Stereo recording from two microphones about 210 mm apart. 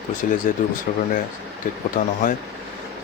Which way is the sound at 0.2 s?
40° left (ahead or behind).